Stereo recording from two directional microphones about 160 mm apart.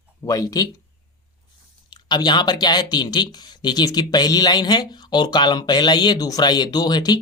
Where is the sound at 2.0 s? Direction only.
25° left (ahead or behind).